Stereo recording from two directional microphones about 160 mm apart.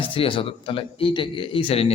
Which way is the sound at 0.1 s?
35° left (ahead or behind).